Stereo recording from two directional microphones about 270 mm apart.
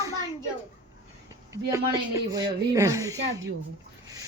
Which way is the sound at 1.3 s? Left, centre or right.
Centre.